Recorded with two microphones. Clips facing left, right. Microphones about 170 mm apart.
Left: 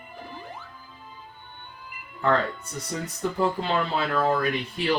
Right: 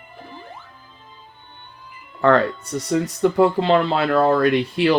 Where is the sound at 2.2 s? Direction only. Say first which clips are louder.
Right 7 dB; 75° right (ahead or behind).